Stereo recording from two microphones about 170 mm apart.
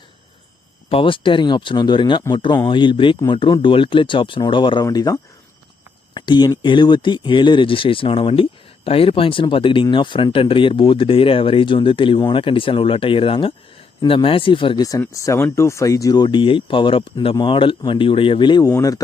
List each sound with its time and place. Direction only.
0.9 s speech: 30° left (ahead or behind)